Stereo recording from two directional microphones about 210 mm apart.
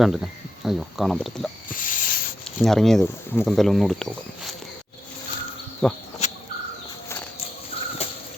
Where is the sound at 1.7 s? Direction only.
40° left (ahead or behind).